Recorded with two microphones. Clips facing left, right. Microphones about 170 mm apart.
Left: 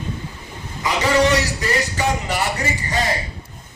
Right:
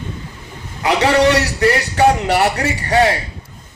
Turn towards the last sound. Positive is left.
turn(degrees=-65)  # may be behind; listen again after turning